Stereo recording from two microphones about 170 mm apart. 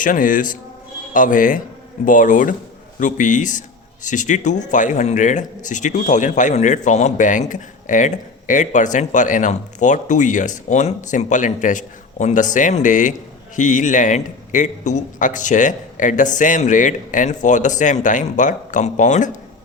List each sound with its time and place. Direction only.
0.0 s speech: 50° left (ahead or behind)